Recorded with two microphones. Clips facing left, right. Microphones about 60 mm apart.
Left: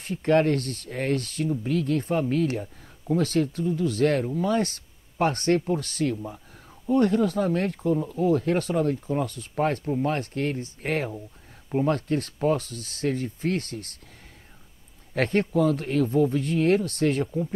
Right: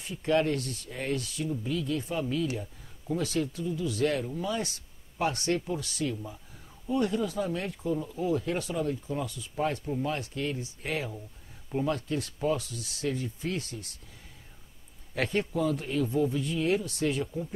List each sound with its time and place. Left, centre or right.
0.0 s speech: left
15.1 s speech: left